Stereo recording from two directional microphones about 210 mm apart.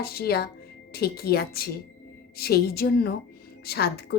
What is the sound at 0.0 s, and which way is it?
A woman's voice, 45° left (ahead or behind).